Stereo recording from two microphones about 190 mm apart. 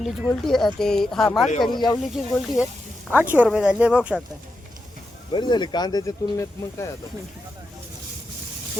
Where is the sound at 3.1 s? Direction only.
10° right (ahead or behind).